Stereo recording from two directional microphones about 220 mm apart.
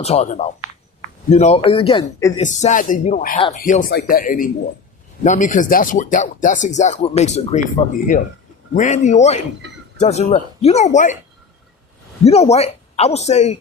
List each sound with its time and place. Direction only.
0.0 s speech: 30° left (ahead or behind)
12.2 s speech: 30° left (ahead or behind)